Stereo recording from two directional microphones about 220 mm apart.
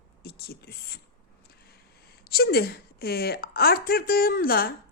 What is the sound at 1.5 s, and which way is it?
Speech, 45° left (ahead or behind).